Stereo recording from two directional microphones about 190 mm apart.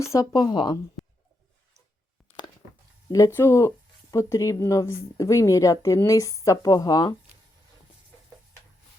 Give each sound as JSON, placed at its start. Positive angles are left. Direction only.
{"t": 0.0, "sound": "speech", "side_deg": 15}
{"t": 1.0, "sound": "a sound", "side_deg": 0}
{"t": 3.1, "sound": "a woman's voice", "side_deg": 15}